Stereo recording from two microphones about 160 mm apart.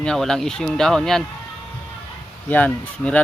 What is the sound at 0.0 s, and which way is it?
Speech, 5° left (ahead or behind).